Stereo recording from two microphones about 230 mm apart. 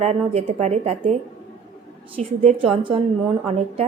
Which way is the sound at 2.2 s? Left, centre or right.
Right.